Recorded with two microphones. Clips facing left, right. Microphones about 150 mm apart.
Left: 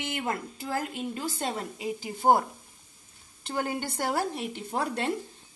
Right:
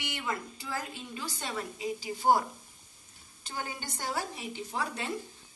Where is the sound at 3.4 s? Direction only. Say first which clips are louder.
Left 8 dB; 60° left (ahead or behind).